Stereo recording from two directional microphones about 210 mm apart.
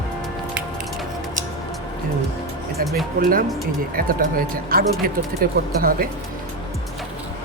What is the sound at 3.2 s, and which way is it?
Speech, 45° right (ahead or behind).